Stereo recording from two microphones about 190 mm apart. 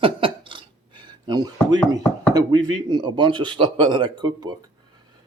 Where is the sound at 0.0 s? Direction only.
25° right (ahead or behind).